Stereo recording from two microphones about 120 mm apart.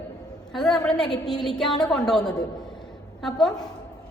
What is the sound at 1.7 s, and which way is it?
Speech, 35° left (ahead or behind).